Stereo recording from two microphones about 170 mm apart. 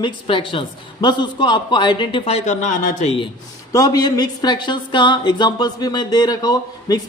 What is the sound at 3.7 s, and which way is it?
A woman's voice, 20° left (ahead or behind).